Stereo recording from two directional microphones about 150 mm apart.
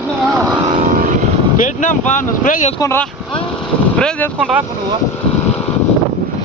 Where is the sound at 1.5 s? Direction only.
55° left (ahead or behind).